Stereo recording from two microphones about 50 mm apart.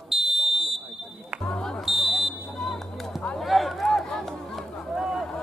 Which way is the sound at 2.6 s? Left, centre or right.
Centre.